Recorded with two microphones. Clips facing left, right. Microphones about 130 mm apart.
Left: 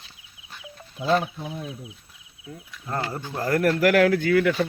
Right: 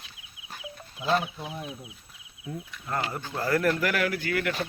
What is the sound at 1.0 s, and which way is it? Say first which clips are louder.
Speech: left 4 dB; 40° left (ahead or behind).